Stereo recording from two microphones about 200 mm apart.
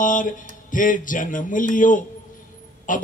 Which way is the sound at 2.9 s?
40° left (ahead or behind).